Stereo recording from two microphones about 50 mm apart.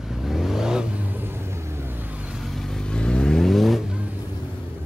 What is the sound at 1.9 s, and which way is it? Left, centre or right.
Vehicle, right.